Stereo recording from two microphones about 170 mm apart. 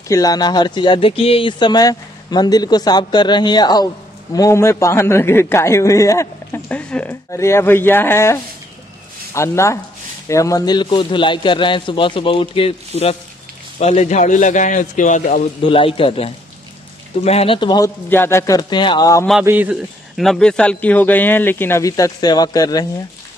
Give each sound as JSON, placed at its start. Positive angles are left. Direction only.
{"t": 0.1, "sound": "a man's voice", "side_deg": 20}
{"t": 15.6, "sound": "a man's voice", "side_deg": 30}
{"t": 19.4, "sound": "a man's voice", "side_deg": -10}